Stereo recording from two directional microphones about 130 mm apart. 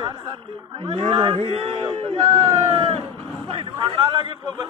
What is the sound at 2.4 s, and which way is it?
Speech, 25° right (ahead or behind).